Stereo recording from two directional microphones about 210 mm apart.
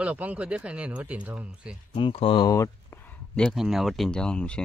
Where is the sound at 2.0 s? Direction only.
25° left (ahead or behind).